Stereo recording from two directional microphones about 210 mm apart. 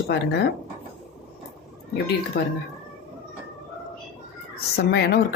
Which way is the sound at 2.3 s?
50° left (ahead or behind).